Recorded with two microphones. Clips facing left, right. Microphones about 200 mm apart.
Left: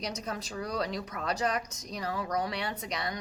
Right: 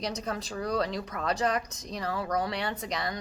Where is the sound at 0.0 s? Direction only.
35° right (ahead or behind).